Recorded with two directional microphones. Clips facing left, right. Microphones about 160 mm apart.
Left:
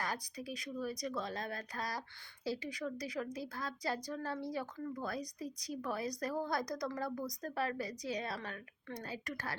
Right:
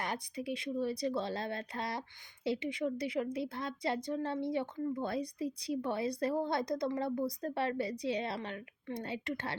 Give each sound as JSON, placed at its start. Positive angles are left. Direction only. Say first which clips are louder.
{"t": 0.0, "sound": "a woman's voice", "louder": "right 3 dB", "side_deg": -25}